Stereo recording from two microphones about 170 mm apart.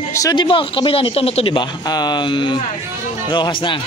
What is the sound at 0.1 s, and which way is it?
A man's voice, 20° left (ahead or behind).